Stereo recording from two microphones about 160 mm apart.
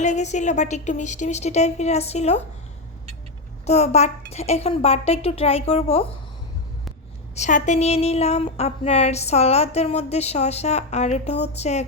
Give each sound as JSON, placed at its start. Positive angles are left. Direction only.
{"t": 0.0, "sound": "a woman's voice", "side_deg": 45}
{"t": 3.7, "sound": "speech", "side_deg": 45}
{"t": 7.3, "sound": "a woman's voice", "side_deg": 50}